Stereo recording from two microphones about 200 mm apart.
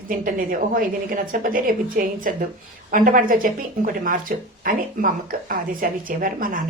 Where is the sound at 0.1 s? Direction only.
45° right (ahead or behind).